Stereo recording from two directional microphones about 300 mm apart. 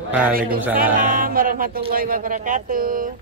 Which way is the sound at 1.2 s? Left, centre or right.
Right.